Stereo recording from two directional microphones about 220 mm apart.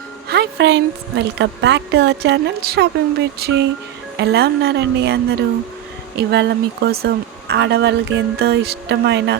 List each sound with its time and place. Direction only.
0.3 s speech: 50° right (ahead or behind)